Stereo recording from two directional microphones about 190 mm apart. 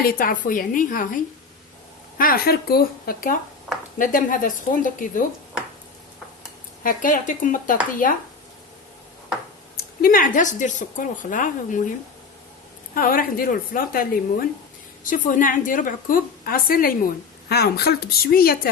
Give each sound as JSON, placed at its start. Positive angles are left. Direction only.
{"t": 0.0, "sound": "speech", "side_deg": 50}
{"t": 6.8, "sound": "speech", "side_deg": 45}
{"t": 9.7, "sound": "speech", "side_deg": 50}
{"t": 12.9, "sound": "speech", "side_deg": 50}